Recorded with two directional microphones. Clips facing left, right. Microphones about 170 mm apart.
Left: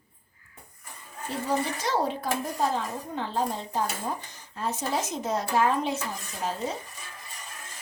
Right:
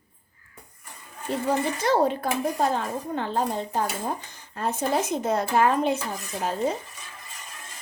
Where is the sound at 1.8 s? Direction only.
55° right (ahead or behind).